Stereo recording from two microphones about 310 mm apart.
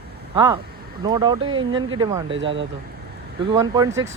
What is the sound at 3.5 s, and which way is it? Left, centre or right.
Speech, centre.